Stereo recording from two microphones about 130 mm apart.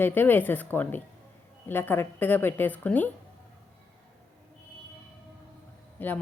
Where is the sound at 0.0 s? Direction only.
15° left (ahead or behind).